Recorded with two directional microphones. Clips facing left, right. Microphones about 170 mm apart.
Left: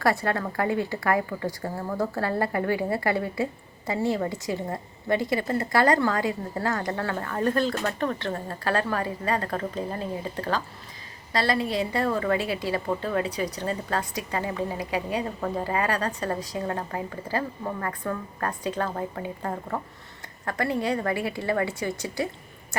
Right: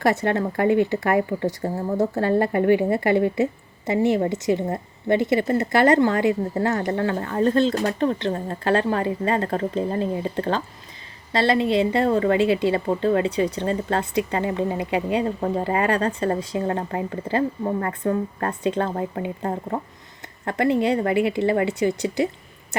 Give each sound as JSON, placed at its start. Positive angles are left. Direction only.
{"t": 0.0, "sound": "a woman's voice", "side_deg": -20}